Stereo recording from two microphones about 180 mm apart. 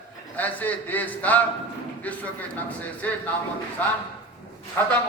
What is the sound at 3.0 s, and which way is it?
Speech, 10° left (ahead or behind).